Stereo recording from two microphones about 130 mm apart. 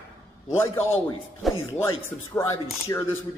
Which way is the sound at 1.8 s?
20° left (ahead or behind).